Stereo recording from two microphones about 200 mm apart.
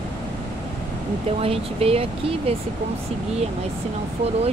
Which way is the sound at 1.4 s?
30° right (ahead or behind).